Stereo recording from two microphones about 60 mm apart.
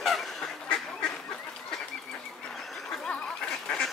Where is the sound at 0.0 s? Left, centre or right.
Centre.